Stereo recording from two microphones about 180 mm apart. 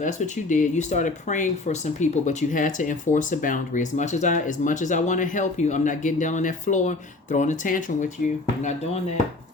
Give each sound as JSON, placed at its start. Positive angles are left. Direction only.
{"t": 0.0, "sound": "speech", "side_deg": 45}